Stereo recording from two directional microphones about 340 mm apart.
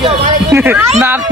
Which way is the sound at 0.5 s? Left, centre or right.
Centre.